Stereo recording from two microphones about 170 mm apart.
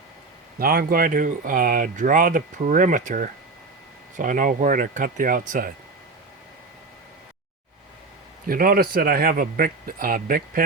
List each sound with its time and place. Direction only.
0.6 s speech: 60° right (ahead or behind)
8.4 s speech: 60° right (ahead or behind)